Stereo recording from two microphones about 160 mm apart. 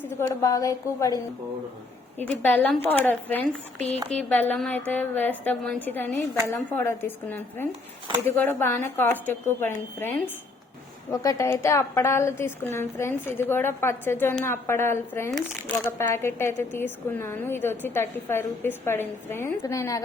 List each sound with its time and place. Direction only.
0.2 s a woman's voice: 20° left (ahead or behind)